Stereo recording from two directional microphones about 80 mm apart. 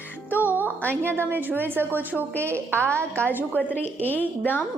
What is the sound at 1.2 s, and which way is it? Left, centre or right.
Speech, right.